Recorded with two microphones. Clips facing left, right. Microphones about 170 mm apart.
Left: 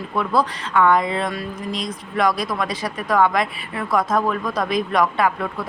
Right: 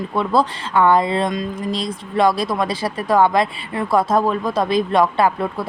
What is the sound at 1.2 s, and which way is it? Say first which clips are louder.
Speech: right 4 dB; 20° right (ahead or behind).